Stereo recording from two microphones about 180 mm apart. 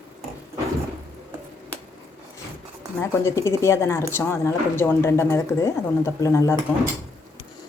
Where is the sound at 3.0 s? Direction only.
15° left (ahead or behind).